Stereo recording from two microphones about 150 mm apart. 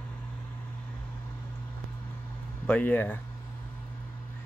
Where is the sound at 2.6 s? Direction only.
10° left (ahead or behind).